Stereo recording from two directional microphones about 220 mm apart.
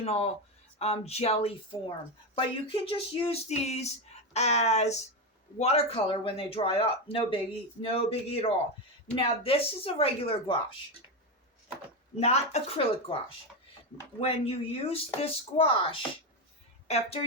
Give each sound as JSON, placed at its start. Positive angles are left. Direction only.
{"t": 0.0, "sound": "speech", "side_deg": 30}
{"t": 12.2, "sound": "speech", "side_deg": 30}
{"t": 14.2, "sound": "speech", "side_deg": 25}